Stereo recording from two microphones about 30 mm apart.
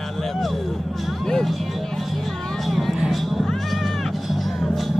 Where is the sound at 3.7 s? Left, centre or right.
Centre.